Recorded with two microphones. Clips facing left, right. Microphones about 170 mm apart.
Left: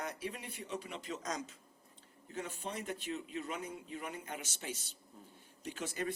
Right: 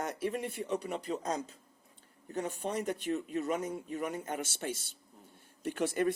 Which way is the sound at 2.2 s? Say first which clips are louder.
Right 7 dB; 45° right (ahead or behind).